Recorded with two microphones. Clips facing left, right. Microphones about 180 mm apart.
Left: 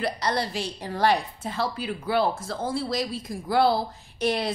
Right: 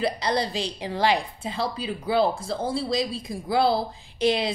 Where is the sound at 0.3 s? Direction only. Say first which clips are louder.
Right 2 dB; 15° right (ahead or behind).